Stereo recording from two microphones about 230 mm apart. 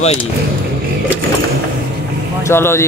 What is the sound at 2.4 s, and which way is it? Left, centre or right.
Speech, centre.